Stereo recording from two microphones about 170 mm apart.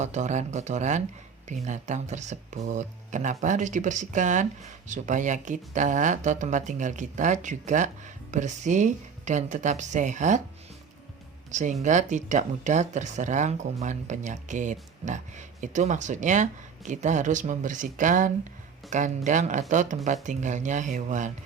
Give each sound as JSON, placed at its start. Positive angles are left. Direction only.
{"t": 0.0, "sound": "speech", "side_deg": -45}
{"t": 11.8, "sound": "speech", "side_deg": -45}